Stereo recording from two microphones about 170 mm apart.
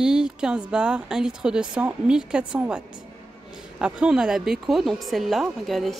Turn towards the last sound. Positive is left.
turn(degrees=0)  # may be behind; listen again after turning